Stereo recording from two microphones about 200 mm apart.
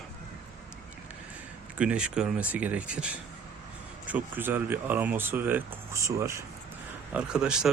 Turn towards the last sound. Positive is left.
turn(degrees=-5)  # may be behind; listen again after turning